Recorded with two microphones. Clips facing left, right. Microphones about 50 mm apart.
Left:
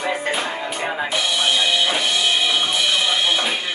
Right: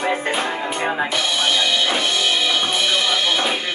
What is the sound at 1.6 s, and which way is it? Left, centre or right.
Music, left.